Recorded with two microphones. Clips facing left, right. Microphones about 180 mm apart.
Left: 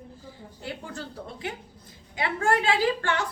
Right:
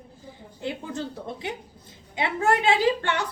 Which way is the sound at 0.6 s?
20° right (ahead or behind).